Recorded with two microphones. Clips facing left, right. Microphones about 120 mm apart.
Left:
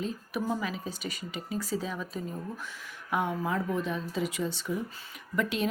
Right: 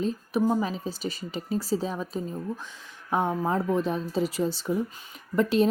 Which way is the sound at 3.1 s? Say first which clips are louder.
Right 4 dB; 35° right (ahead or behind).